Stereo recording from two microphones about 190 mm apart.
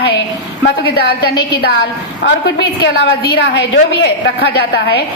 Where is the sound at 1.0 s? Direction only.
55° left (ahead or behind).